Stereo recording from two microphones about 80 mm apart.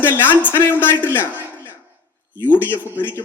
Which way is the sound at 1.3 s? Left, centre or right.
Right.